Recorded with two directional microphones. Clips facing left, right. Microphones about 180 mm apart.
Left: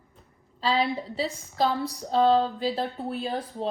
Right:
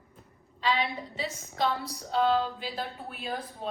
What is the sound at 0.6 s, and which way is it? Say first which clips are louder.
A woman's voice: left 4 dB; 35° left (ahead or behind).